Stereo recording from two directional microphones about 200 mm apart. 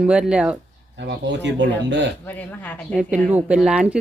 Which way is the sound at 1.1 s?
65° right (ahead or behind).